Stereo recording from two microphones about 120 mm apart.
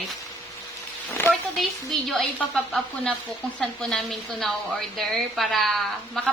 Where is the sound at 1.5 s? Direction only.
Centre (ahead or behind).